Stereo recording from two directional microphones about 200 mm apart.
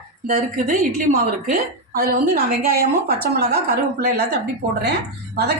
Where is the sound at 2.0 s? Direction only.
50° right (ahead or behind).